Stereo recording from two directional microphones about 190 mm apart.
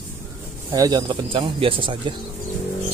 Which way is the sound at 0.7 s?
20° right (ahead or behind).